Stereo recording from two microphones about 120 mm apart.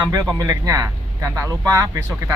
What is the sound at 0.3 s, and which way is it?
Speech, 30° right (ahead or behind).